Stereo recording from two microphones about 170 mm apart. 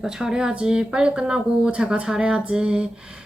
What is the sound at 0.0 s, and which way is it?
Speech, 5° right (ahead or behind).